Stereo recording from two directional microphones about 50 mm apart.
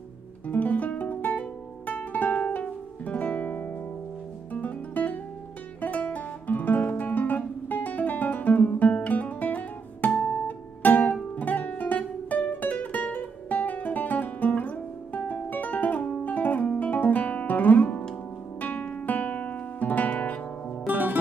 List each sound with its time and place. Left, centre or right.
0.5 s music: left
5.8 s guitar: left
11.3 s music: left
16.6 s guitar: left
18.6 s music: left
19.0 s guitar: left
20.8 s music: right